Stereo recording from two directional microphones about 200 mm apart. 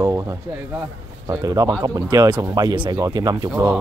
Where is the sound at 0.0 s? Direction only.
15° right (ahead or behind).